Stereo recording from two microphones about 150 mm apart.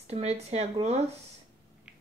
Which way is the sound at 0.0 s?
45° right (ahead or behind).